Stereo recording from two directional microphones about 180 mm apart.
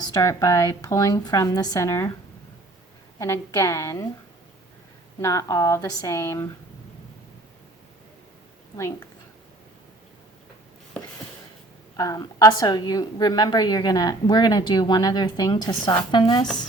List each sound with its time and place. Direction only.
0.1 s a woman's voice: 20° left (ahead or behind)
3.2 s speech: 15° left (ahead or behind)
5.2 s speech: 20° left (ahead or behind)
8.7 s a woman's voice: 20° left (ahead or behind)
11.9 s a woman's voice: 20° left (ahead or behind)